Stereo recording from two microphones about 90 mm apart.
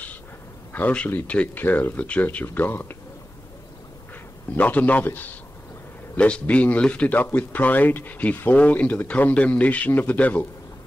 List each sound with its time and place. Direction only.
0.7 s speech: 15° left (ahead or behind)
4.6 s speech: 15° left (ahead or behind)